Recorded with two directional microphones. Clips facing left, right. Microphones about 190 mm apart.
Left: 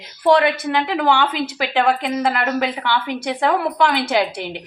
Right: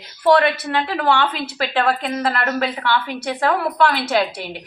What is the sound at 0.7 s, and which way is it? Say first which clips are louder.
A woman's voice: left 1 dB; 15° left (ahead or behind).